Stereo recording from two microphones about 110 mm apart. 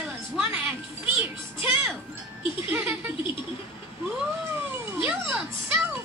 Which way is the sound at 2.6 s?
15° right (ahead or behind).